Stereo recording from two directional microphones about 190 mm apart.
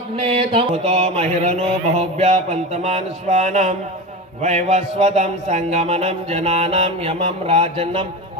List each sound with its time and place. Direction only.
0.2 s speech: 30° right (ahead or behind)